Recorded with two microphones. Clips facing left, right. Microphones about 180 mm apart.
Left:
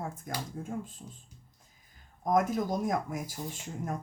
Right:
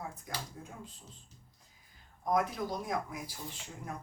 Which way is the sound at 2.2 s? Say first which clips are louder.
Left 4 dB; 45° left (ahead or behind).